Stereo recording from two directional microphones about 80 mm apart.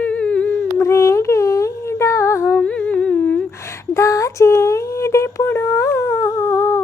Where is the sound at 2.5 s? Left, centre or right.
Centre.